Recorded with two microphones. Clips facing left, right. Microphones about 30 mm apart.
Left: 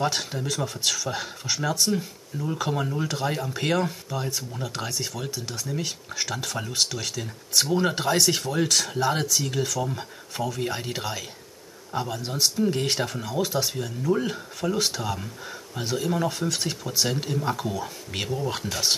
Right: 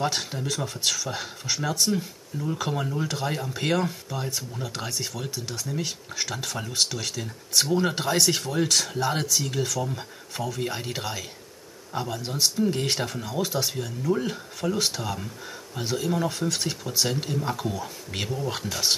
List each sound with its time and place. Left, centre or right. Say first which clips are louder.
0.0 s speech: left 1 dB; centre